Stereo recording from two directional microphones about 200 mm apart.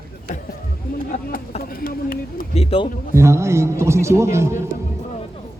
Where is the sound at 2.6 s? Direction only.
30° left (ahead or behind).